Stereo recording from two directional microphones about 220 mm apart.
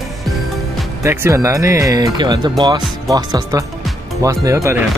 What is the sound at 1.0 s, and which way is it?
Speech, 10° right (ahead or behind).